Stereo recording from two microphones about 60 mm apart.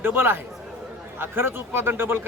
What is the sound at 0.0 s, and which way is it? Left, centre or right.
A man's voice, right.